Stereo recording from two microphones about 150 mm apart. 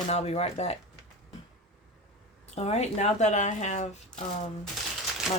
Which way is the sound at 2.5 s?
45° left (ahead or behind).